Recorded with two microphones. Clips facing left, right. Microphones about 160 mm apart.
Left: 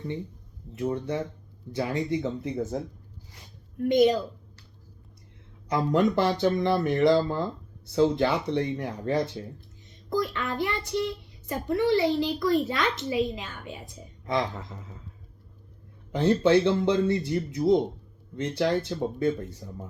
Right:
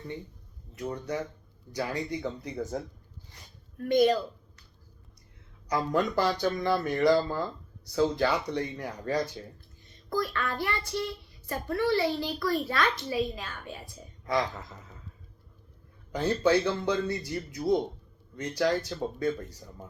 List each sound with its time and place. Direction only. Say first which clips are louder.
0.8 s a child's voice: left 4 dB; 25° left (ahead or behind)
5.9 s a child's voice: left 4 dB; 25° left (ahead or behind)
16.1 s a child's voice: left 4 dB; 25° left (ahead or behind)